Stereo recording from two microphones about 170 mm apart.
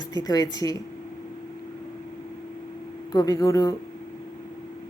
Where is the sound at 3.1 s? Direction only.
20° left (ahead or behind).